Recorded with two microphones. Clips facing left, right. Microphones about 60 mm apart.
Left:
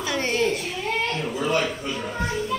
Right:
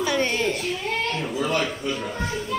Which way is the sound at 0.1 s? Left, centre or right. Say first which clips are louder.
Left 4 dB; centre.